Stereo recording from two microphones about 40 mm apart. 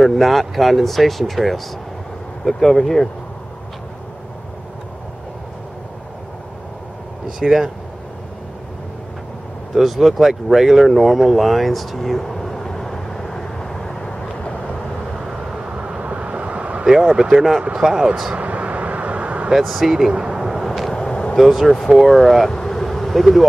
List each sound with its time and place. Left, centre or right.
0.0 s speech: centre
7.3 s speech: centre
9.8 s a sound: centre
15.1 s vehicle: centre
15.6 s vehicle: right
16.8 s speech: centre
18.4 s vehicle: right
19.6 s speech: centre
19.9 s speech: centre
20.4 s vehicle: centre
20.9 s vehicle: centre
21.4 s speech: centre
22.5 s vehicle: centre